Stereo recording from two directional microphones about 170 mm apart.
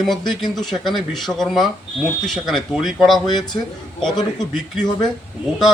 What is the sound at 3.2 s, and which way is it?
Speech, 25° left (ahead or behind).